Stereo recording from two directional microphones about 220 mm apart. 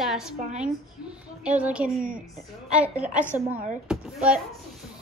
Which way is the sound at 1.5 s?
5° right (ahead or behind).